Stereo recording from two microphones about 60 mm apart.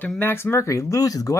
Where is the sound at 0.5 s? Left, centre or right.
Left.